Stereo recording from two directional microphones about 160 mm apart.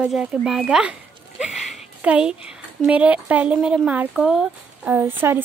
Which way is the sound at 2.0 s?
5° right (ahead or behind).